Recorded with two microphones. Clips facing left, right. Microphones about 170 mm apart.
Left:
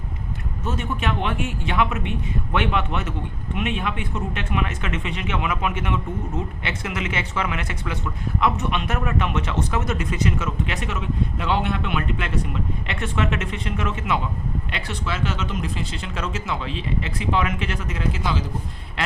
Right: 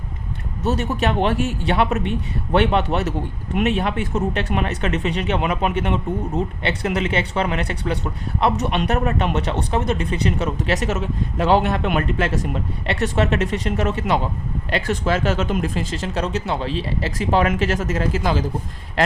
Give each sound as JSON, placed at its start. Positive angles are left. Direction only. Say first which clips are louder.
{"t": 0.8, "sound": "speech", "louder": "right 4 dB", "side_deg": -40}
{"t": 19.0, "sound": "quack", "louder": "right 8 dB", "side_deg": -40}